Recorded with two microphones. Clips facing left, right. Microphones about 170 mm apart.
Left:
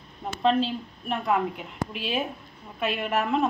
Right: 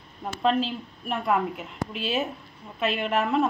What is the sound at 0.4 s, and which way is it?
Speech, 5° right (ahead or behind).